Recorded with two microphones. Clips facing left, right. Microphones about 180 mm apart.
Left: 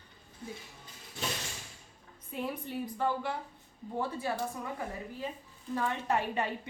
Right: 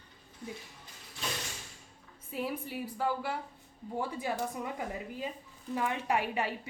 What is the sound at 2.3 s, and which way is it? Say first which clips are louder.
A woman's voice: even; 5° right (ahead or behind).